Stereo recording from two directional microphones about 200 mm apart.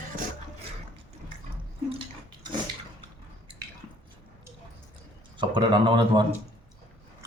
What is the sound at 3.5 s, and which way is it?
Squish, 25° right (ahead or behind).